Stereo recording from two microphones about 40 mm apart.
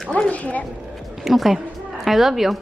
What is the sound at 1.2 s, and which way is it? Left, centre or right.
A woman's voice, centre.